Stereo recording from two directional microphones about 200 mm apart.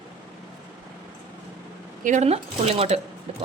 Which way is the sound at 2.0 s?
40° right (ahead or behind).